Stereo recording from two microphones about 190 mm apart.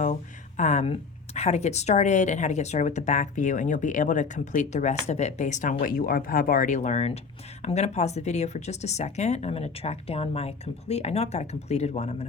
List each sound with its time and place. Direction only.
0.0 s speech: 40° left (ahead or behind)